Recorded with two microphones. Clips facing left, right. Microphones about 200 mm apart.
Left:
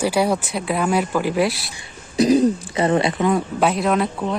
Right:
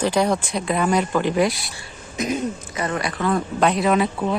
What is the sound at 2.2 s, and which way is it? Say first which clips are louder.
Speech: left 9 dB; 35° left (ahead or behind).